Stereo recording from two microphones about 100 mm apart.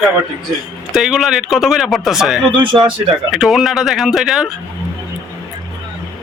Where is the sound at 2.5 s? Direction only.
55° right (ahead or behind).